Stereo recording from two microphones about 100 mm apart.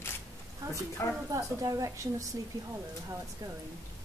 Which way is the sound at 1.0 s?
25° left (ahead or behind).